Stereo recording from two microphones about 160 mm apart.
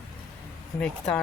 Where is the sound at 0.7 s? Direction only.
5° left (ahead or behind).